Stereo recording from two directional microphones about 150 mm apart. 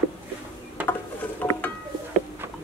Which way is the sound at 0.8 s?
10° right (ahead or behind).